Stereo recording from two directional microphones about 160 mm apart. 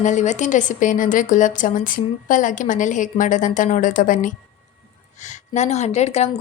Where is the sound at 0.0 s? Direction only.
50° left (ahead or behind).